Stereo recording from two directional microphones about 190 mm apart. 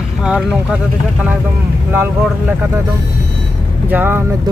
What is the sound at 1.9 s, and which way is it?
Speech, 10° right (ahead or behind).